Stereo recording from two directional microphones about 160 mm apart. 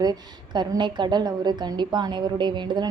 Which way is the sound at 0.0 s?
25° right (ahead or behind).